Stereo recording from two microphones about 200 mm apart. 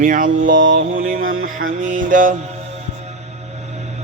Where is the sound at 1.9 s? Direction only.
40° right (ahead or behind).